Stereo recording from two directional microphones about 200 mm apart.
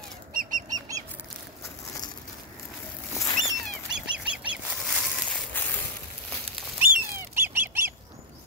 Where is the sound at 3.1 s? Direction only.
20° left (ahead or behind).